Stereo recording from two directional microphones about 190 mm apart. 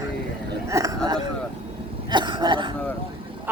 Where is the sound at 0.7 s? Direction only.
15° right (ahead or behind).